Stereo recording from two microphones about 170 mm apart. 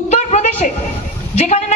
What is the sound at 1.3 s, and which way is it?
Speech, 45° left (ahead or behind).